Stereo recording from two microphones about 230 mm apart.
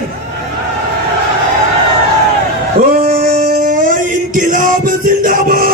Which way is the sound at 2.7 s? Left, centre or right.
Right.